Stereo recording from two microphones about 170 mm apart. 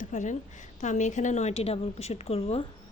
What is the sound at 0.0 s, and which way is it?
A woman's voice, 45° left (ahead or behind).